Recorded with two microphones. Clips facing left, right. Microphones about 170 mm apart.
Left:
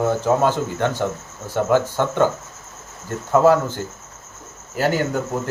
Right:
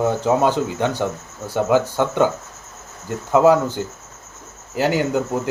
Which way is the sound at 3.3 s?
15° right (ahead or behind).